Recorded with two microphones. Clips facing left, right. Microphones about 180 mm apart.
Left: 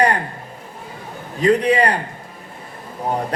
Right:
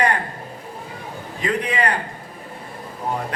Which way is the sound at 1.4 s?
35° left (ahead or behind).